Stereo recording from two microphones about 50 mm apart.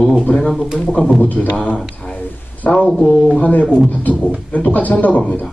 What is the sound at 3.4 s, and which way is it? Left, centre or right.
A man's voice, left.